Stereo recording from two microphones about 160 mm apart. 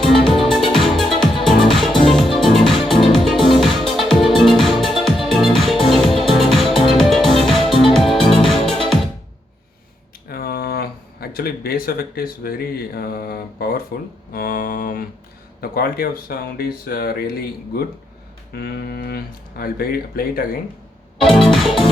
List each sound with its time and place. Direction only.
0.1 s music: centre (ahead or behind)
10.2 s a sound: 70° left (ahead or behind)
14.3 s mantra: 65° left (ahead or behind)
15.6 s speech: 70° left (ahead or behind)
21.2 s music: centre (ahead or behind)